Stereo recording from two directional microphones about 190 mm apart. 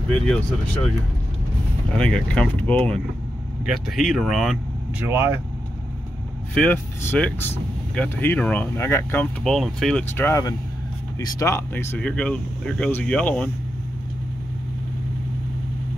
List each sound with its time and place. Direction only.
2.0 s speech: 5° left (ahead or behind)
5.0 s speech: 10° right (ahead or behind)
6.5 s speech: 5° left (ahead or behind)